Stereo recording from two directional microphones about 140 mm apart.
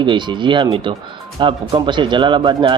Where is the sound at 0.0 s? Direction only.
35° right (ahead or behind).